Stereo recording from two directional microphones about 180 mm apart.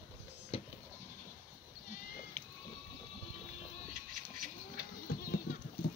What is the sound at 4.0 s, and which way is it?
Bird, 50° right (ahead or behind).